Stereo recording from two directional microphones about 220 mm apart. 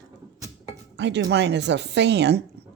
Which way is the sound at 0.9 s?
50° right (ahead or behind).